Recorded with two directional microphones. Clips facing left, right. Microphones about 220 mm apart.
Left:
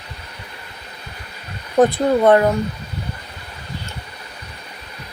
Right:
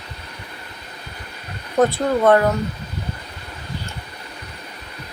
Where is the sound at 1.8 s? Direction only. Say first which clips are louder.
Left 3 dB; 20° left (ahead or behind).